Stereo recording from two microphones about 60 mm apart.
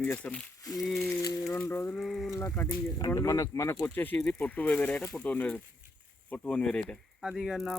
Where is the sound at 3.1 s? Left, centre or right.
Left.